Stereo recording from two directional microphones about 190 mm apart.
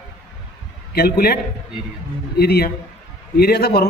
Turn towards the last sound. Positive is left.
turn(degrees=55)  # may be behind; listen again after turning